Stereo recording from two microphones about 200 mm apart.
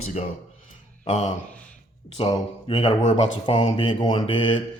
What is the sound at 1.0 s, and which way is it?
Speech, 35° left (ahead or behind).